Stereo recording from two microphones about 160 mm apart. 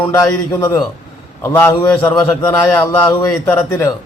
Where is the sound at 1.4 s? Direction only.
15° left (ahead or behind).